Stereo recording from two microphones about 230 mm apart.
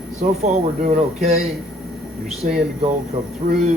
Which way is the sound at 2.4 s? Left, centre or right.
Right.